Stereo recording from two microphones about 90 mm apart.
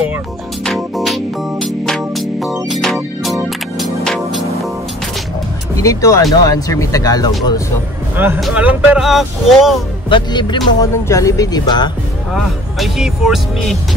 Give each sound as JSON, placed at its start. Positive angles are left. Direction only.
{"t": 0.7, "sound": "music", "side_deg": 0}
{"t": 5.8, "sound": "speech", "side_deg": 35}
{"t": 8.2, "sound": "speech", "side_deg": -20}
{"t": 9.0, "sound": "speech", "side_deg": 0}
{"t": 10.0, "sound": "speech", "side_deg": 60}
{"t": 10.8, "sound": "speech", "side_deg": 35}
{"t": 12.3, "sound": "speech", "side_deg": 0}